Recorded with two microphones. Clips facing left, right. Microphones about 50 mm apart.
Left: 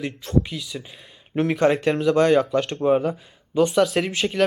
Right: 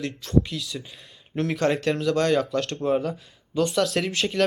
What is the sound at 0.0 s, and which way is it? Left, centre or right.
Speech, centre.